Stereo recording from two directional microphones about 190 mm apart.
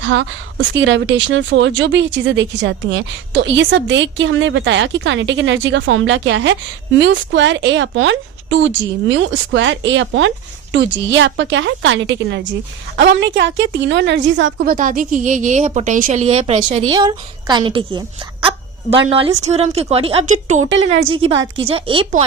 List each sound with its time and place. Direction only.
0.0 s a woman's voice: 70° right (ahead or behind)
5.6 s a woman's voice: 85° right
14.6 s a woman's voice: 45° right (ahead or behind)
16.8 s a woman's voice: 25° right (ahead or behind)
20.6 s a woman's voice: 80° right
21.2 s a woman's voice: 25° right (ahead or behind)